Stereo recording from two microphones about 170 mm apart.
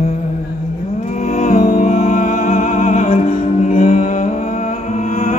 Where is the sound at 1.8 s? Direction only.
40° left (ahead or behind).